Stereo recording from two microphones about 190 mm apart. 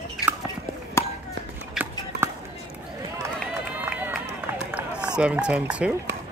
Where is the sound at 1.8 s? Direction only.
Centre (ahead or behind).